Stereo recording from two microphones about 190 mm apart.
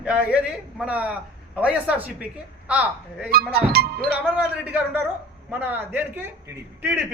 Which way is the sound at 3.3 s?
55° right (ahead or behind).